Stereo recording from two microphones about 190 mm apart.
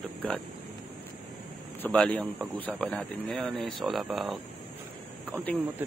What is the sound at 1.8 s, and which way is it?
A man's voice, 5° left (ahead or behind).